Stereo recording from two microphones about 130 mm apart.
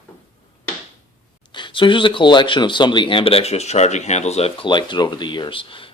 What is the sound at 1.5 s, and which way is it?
A man's voice, 40° left (ahead or behind).